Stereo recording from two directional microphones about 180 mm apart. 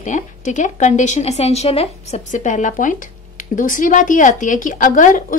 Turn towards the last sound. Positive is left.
turn(degrees=45)  # may be behind; listen again after turning